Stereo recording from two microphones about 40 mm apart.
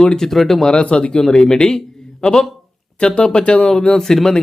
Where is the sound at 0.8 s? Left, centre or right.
Left.